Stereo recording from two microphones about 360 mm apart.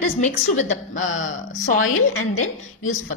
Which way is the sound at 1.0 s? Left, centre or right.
Left.